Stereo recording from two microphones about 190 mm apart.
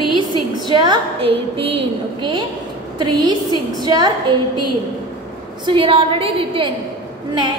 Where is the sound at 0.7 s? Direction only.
25° right (ahead or behind).